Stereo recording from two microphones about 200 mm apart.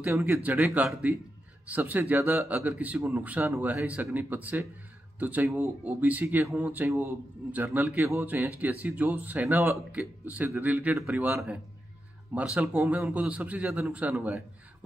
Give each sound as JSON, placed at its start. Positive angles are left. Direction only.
{"t": 0.0, "sound": "speech", "side_deg": -10}